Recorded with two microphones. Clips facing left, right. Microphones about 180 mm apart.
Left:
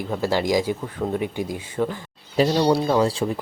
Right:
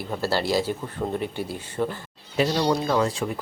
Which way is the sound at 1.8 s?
5° right (ahead or behind).